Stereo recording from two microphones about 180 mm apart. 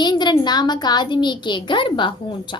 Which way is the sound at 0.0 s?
25° left (ahead or behind).